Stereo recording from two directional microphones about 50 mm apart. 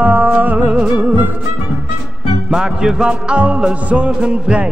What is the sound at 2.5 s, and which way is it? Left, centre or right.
Music, centre.